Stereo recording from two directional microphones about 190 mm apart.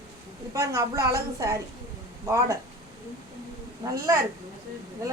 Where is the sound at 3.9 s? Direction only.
15° right (ahead or behind).